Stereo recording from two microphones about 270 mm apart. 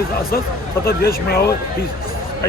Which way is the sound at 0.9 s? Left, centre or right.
Left.